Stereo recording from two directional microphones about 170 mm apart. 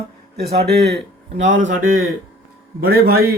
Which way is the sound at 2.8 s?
65° right (ahead or behind).